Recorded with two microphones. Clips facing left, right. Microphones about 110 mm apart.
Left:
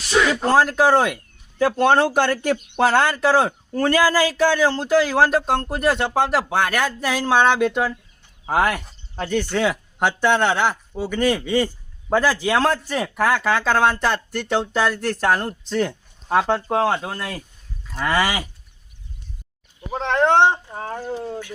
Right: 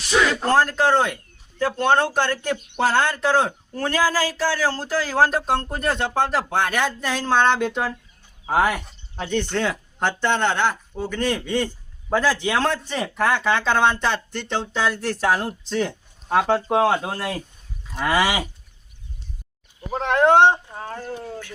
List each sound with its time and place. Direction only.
0.3 s speech: 5° left (ahead or behind)
4.3 s speech: 20° left (ahead or behind); by 18.4 s 10° right (ahead or behind)
19.9 s speech: 10° right (ahead or behind)
20.7 s speech: 15° left (ahead or behind)